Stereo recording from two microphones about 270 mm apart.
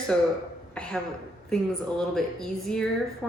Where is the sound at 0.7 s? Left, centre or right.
Centre.